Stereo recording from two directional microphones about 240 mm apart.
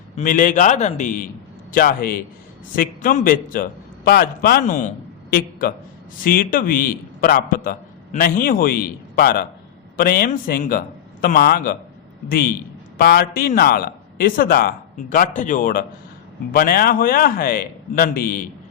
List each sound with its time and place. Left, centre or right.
0.2 s a man's voice: left